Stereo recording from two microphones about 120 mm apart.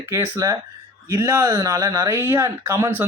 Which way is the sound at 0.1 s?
20° right (ahead or behind).